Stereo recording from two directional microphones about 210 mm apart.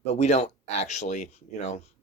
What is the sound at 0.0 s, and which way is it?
Speech, 30° left (ahead or behind).